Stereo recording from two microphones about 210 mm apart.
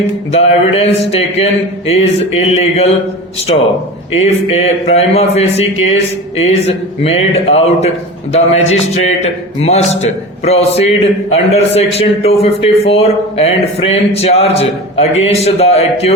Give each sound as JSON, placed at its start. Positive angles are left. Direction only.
{"t": 0.3, "sound": "a man's voice", "side_deg": 30}
{"t": 2.5, "sound": "a man's voice", "side_deg": 30}
{"t": 4.2, "sound": "a man's voice", "side_deg": 30}